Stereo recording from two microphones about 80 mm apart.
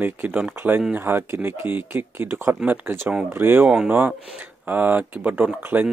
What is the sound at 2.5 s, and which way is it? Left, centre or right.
Speech, centre.